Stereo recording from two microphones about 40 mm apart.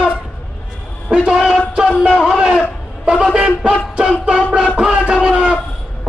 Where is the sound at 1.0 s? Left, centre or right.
Right.